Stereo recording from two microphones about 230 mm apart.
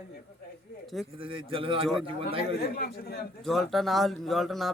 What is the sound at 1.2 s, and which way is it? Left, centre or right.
Speech, right.